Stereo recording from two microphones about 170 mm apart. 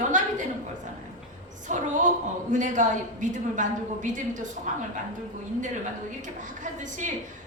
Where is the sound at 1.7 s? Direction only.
45° right (ahead or behind).